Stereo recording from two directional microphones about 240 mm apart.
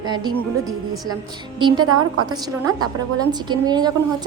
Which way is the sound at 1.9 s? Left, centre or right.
Right.